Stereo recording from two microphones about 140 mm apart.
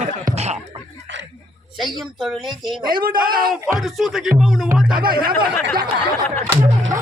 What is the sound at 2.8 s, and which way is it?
Speech, 90° right.